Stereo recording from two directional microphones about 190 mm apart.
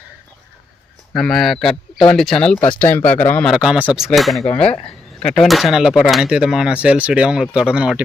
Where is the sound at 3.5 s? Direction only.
5° right (ahead or behind).